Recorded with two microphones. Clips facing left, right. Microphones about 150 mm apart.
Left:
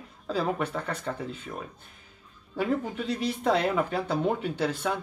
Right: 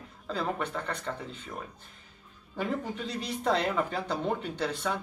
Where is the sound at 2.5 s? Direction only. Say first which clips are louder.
Left 4 dB; 5° left (ahead or behind).